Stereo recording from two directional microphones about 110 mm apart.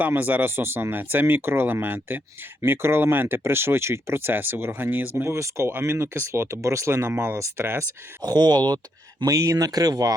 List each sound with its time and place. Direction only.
0.0 s speech: 15° right (ahead or behind)
8.2 s speech: 40° right (ahead or behind)